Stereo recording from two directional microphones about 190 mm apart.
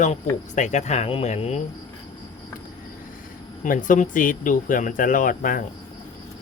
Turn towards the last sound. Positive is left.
turn(degrees=45)  # may be behind; listen again after turning